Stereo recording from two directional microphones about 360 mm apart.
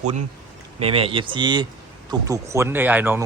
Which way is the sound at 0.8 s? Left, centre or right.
Centre.